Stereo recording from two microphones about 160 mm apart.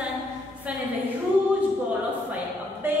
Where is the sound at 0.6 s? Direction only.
10° right (ahead or behind).